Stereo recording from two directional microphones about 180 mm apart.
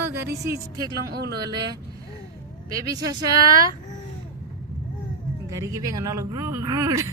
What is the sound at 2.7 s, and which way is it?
Speech, 20° right (ahead or behind).